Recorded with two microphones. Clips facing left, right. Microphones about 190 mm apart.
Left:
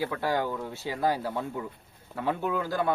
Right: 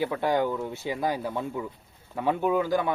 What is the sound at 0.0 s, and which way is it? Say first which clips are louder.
A man's voice: right 3 dB; 20° right (ahead or behind).